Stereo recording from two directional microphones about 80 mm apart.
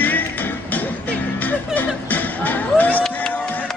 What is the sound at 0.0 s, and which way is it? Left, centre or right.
Music, left.